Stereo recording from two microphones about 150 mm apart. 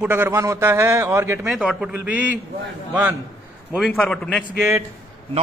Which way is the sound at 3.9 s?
5° left (ahead or behind).